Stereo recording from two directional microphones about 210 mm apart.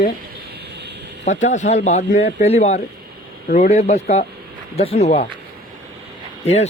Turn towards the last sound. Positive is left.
turn(degrees=30)  # may be behind; listen again after turning